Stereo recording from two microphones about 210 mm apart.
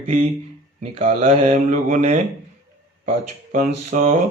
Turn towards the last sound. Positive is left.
turn(degrees=-40)  # may be behind; listen again after turning